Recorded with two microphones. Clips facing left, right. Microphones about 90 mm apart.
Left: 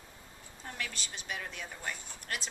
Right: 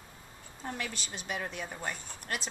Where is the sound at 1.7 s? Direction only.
25° right (ahead or behind).